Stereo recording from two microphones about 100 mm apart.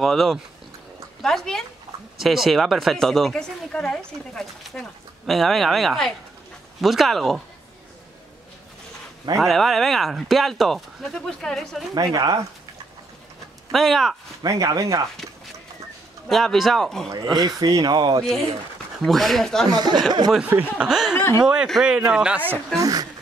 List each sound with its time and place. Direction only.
0.0 s speech: centre (ahead or behind)
9.4 s speech: centre (ahead or behind)
11.9 s speech: 40° right (ahead or behind)
13.7 s speech: centre (ahead or behind)
14.4 s speech: 35° right (ahead or behind)
16.3 s speech: centre (ahead or behind)
17.6 s speech: 40° right (ahead or behind)
19.0 s speech: centre (ahead or behind)
19.7 s speech: 45° right (ahead or behind)
20.4 s a man's voice: 15° right (ahead or behind)
20.9 s a man's voice: 5° right (ahead or behind)
22.8 s speech: 35° right (ahead or behind)